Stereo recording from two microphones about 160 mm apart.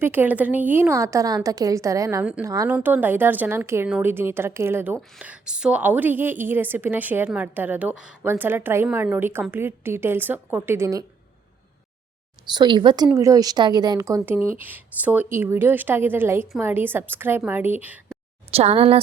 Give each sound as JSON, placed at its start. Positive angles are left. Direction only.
{"t": 0.0, "sound": "a woman's voice", "side_deg": -10}
{"t": 2.6, "sound": "a woman's voice", "side_deg": -10}
{"t": 12.5, "sound": "a woman's voice", "side_deg": -30}
{"t": 18.5, "sound": "a woman's voice", "side_deg": -40}